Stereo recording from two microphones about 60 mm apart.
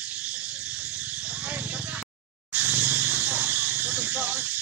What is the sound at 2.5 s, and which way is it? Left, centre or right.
Snake, right.